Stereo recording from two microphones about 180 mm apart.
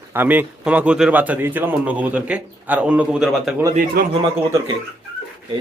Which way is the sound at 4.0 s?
55° right (ahead or behind).